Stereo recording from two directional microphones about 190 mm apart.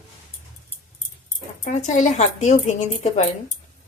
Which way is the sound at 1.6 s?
40° left (ahead or behind).